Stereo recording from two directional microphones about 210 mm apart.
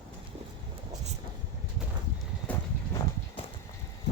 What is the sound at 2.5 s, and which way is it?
Clip-clop, 5° left (ahead or behind).